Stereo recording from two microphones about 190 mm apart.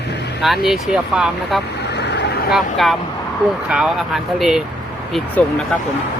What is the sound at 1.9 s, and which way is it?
Vehicle, 65° left (ahead or behind).